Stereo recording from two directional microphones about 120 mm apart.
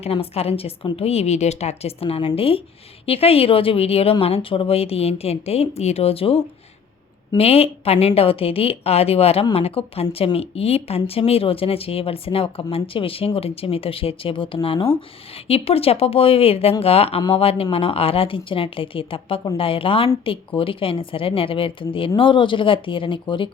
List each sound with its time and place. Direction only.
0.0 s a woman's voice: 55° left (ahead or behind)